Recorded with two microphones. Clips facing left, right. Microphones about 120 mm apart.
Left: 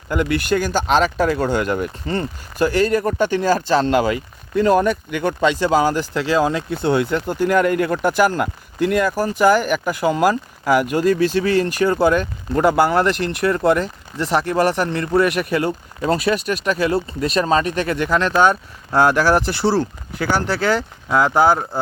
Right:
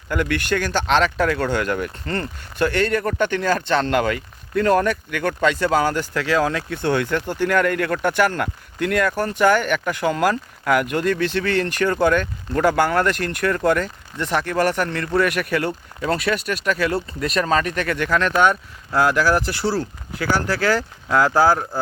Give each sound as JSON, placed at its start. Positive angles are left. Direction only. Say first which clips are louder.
{"t": 0.1, "sound": "speech", "louder": "left 3 dB", "side_deg": 15}
{"t": 3.7, "sound": "speech", "louder": "left 2 dB", "side_deg": 30}
{"t": 6.1, "sound": "speech", "louder": "left 1 dB", "side_deg": 25}
{"t": 6.7, "sound": "speech", "louder": "left 3 dB", "side_deg": 10}
{"t": 10.6, "sound": "speech", "louder": "left 3 dB", "side_deg": 30}
{"t": 11.3, "sound": "speech", "louder": "left 4 dB", "side_deg": 10}